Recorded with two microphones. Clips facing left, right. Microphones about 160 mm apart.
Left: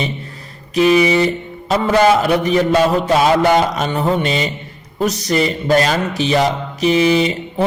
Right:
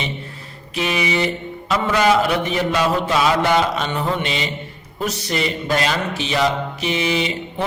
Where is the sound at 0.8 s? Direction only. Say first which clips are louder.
Left 9 dB; 40° left (ahead or behind).